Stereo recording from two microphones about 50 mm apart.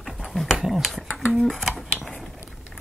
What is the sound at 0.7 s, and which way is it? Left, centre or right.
Speech, centre.